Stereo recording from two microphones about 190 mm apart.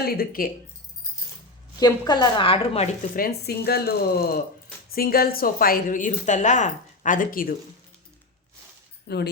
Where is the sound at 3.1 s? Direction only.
55° left (ahead or behind).